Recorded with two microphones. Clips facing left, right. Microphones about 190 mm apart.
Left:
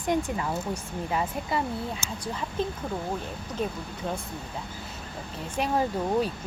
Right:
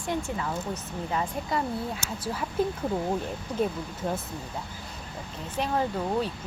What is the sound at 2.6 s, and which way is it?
Speech, 10° right (ahead or behind).